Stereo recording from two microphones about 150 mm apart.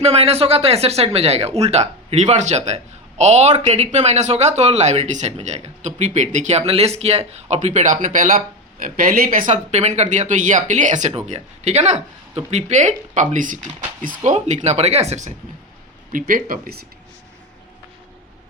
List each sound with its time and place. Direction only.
0.0 s speech: 45° right (ahead or behind)
8.0 s speech: 60° right (ahead or behind)
11.1 s speech: 45° right (ahead or behind); by 14.3 s 65° right (ahead or behind)
14.3 s speech: 50° right (ahead or behind)
16.1 s speech: 65° right (ahead or behind)